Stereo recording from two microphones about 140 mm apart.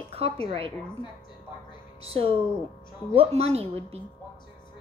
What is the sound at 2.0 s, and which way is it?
A woman's voice, 40° right (ahead or behind).